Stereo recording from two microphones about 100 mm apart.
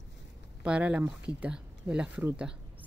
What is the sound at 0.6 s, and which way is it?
A woman's voice, 15° right (ahead or behind).